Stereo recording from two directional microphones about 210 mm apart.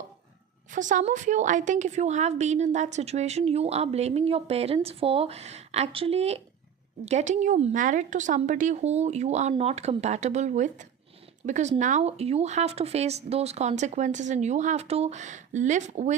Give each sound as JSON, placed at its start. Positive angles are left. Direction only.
{"t": 0.7, "sound": "a woman's voice", "side_deg": -35}